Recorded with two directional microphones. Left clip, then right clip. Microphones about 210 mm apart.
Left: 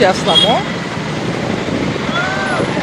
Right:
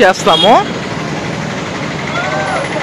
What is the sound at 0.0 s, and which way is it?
Speech, 50° right (ahead or behind).